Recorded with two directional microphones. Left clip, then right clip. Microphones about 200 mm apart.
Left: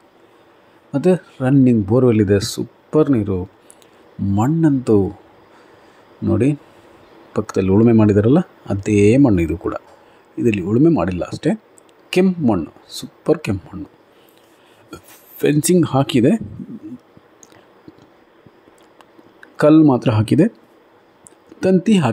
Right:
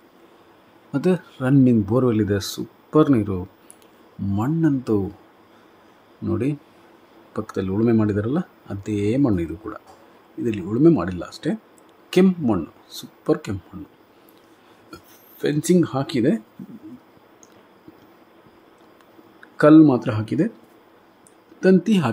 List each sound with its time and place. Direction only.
0.9 s speech: 10° left (ahead or behind)
6.3 s speech: 15° left (ahead or behind)
14.9 s a sound: 25° left (ahead or behind)
15.6 s speech: 30° left (ahead or behind)
19.4 s speech: 25° left (ahead or behind)
21.7 s speech: 15° left (ahead or behind)